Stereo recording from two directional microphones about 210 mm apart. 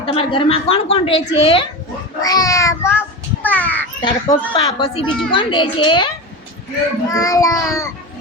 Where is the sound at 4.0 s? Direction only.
20° left (ahead or behind).